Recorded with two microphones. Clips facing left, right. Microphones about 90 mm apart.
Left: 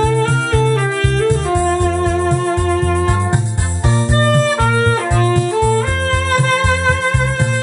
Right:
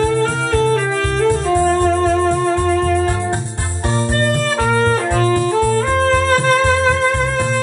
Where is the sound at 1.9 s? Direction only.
10° left (ahead or behind).